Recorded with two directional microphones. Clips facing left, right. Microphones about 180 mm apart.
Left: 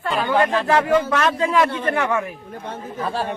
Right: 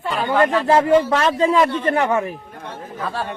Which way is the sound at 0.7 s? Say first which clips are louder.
Right 5 dB; 30° right (ahead or behind).